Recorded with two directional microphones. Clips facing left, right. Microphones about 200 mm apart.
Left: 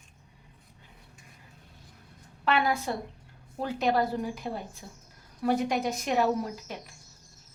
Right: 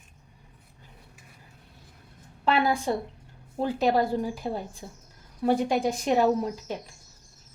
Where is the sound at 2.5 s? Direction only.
30° right (ahead or behind).